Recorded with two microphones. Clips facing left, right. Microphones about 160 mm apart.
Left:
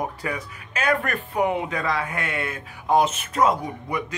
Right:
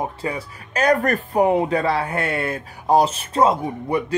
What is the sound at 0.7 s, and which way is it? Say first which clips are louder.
Speech: right 6 dB; 40° right (ahead or behind).